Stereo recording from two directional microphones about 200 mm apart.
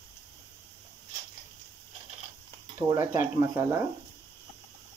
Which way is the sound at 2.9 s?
15° right (ahead or behind).